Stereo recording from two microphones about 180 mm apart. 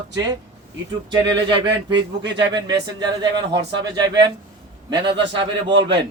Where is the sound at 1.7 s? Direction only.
80° right.